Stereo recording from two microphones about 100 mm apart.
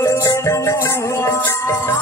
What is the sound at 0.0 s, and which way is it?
Music, 30° left (ahead or behind).